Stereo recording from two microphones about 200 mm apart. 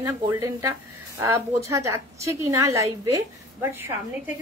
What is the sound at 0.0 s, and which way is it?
Speech, 15° right (ahead or behind).